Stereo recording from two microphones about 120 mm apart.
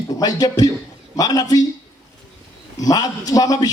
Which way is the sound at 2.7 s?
30° left (ahead or behind).